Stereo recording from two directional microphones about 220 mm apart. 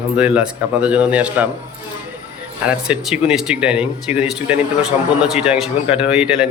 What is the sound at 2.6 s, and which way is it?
Speech, 5° right (ahead or behind).